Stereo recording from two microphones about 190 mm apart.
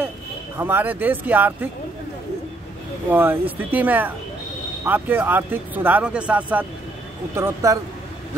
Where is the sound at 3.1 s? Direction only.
10° right (ahead or behind).